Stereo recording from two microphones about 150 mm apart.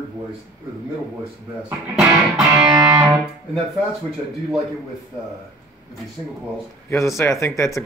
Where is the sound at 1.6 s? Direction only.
5° right (ahead or behind).